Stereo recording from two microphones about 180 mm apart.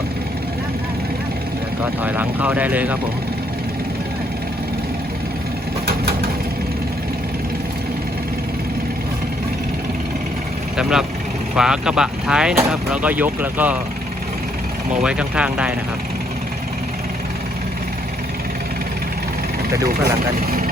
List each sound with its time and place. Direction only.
1.8 s speech: 10° right (ahead or behind)
5.8 s vehicle: 60° right (ahead or behind)
10.8 s speech: 5° right (ahead or behind)
15.0 s speech: 5° right (ahead or behind)
20.3 s speech: 55° right (ahead or behind)